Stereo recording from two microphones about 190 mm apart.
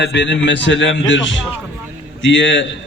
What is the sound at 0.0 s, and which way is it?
A man's voice, 65° left (ahead or behind).